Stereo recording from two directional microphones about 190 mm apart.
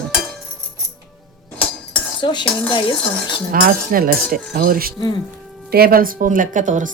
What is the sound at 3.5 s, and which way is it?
Speech, 50° right (ahead or behind).